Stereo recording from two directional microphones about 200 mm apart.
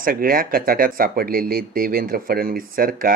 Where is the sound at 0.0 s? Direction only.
45° right (ahead or behind).